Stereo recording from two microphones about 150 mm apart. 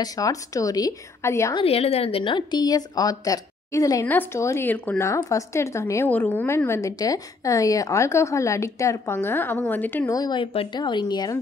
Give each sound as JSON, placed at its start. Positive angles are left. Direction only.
{"t": 0.0, "sound": "speech", "side_deg": 25}
{"t": 1.5, "sound": "speech", "side_deg": 40}
{"t": 10.1, "sound": "speech", "side_deg": 30}